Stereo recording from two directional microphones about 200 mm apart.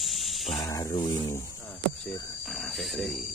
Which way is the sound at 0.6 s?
15° left (ahead or behind).